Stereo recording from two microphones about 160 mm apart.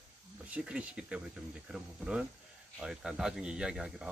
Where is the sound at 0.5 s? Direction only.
5° right (ahead or behind).